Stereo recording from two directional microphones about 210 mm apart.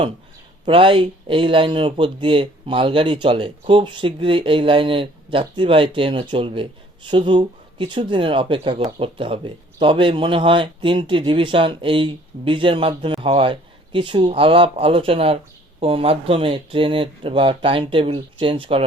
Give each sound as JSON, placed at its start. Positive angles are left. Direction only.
{"t": 0.6, "sound": "speech", "side_deg": -25}